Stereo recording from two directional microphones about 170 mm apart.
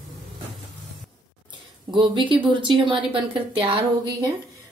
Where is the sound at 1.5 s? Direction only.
30° right (ahead or behind).